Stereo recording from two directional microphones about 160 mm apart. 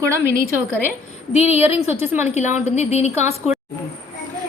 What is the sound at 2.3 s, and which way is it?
Speech, 45° left (ahead or behind).